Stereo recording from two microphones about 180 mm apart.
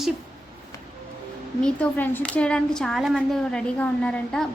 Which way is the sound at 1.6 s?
10° left (ahead or behind).